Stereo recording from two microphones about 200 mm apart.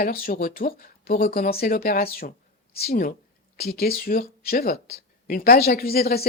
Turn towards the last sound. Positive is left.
turn(degrees=50)  # may be behind; listen again after turning